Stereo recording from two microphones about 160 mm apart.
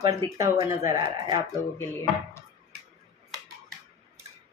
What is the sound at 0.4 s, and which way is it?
Speech, 20° right (ahead or behind).